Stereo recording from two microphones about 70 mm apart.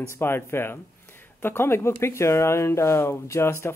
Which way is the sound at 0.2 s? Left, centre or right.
Left.